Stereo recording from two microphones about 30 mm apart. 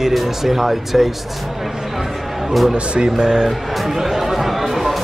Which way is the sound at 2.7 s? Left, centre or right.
Right.